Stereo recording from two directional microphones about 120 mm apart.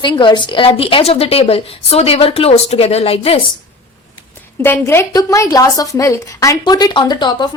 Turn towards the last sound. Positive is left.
turn(degrees=35)  # may be behind; listen again after turning